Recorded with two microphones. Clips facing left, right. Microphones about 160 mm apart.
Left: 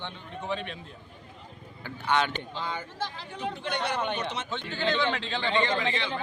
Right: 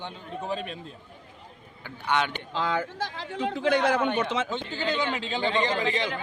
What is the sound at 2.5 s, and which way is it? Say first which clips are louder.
A man's voice: right 8 dB; 90° right.